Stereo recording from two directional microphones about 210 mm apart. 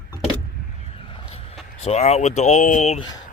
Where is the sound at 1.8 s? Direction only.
30° left (ahead or behind).